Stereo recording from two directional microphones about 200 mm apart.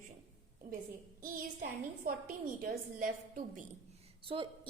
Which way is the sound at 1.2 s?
45° right (ahead or behind).